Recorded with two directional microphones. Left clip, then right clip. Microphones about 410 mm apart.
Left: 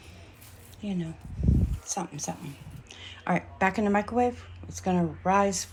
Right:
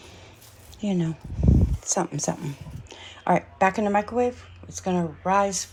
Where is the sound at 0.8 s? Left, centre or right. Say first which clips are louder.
Right 8 dB; centre.